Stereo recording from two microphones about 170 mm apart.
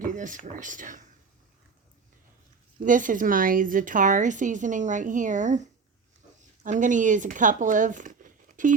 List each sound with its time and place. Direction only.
0.2 s a woman's voice: 50° right (ahead or behind)
2.8 s a woman's voice: 50° right (ahead or behind)